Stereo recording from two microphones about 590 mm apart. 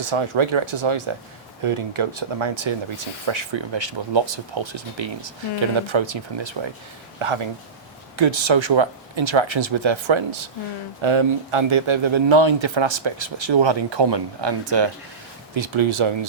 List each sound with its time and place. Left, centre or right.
0.0 s a man's voice: right